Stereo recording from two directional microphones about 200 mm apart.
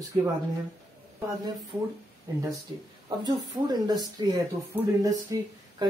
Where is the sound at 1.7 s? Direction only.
15° right (ahead or behind).